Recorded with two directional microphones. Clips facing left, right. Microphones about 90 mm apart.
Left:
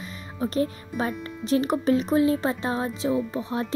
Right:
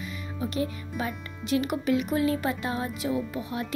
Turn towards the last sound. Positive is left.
turn(degrees=30)  # may be behind; listen again after turning